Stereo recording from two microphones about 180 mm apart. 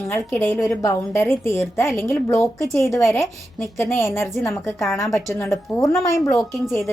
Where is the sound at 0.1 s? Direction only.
10° left (ahead or behind).